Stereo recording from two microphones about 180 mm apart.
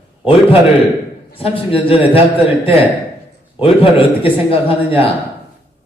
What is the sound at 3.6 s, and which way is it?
A man's voice, 30° left (ahead or behind).